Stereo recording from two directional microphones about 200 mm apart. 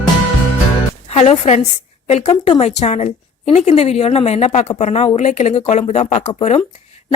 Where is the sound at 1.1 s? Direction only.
35° left (ahead or behind).